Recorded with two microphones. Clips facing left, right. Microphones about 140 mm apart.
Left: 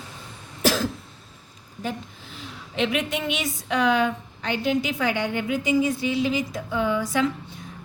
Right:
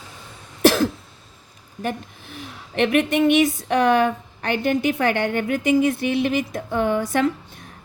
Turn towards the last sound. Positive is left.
turn(degrees=-55)  # may be behind; listen again after turning